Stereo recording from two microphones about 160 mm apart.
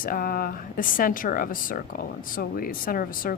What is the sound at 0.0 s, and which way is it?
Speech, 65° left (ahead or behind).